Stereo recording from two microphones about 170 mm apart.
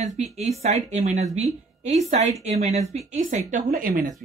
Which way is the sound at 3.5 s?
55° right (ahead or behind).